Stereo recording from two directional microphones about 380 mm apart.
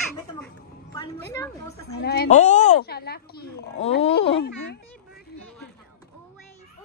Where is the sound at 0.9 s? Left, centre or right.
Centre.